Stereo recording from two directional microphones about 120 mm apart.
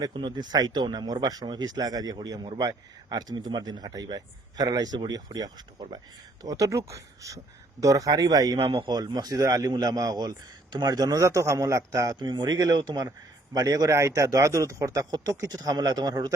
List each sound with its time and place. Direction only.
0.0 s a man's voice: 40° right (ahead or behind)
8.5 s a man's voice: 50° right (ahead or behind); by 16.3 s 35° right (ahead or behind)